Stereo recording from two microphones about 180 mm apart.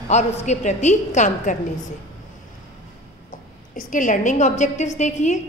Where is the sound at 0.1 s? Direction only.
40° left (ahead or behind).